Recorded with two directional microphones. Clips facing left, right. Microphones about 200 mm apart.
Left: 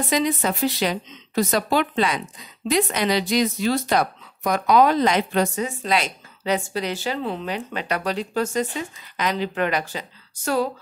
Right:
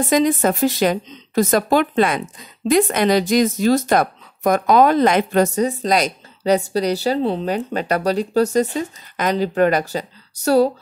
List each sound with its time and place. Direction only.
0.1 s speech: 50° right (ahead or behind)